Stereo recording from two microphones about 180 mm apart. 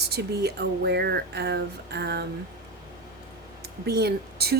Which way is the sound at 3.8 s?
65° right (ahead or behind).